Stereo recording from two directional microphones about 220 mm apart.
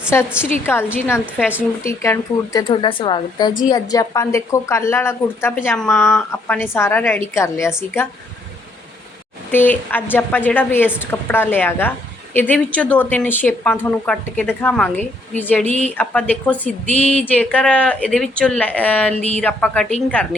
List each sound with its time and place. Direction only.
0.6 s a woman's voice: 10° left (ahead or behind)
9.5 s a woman's voice: 10° left (ahead or behind)